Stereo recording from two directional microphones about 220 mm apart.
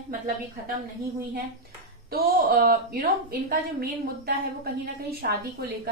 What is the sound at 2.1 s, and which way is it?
A woman's voice, 40° right (ahead or behind).